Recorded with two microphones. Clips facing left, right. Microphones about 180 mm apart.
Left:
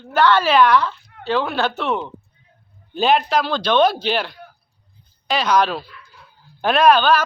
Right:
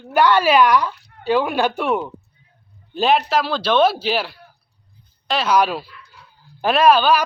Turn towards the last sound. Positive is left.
turn(degrees=-10)  # may be behind; listen again after turning